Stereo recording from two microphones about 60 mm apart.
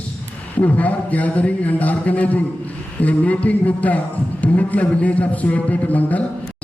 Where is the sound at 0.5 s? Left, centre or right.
Left.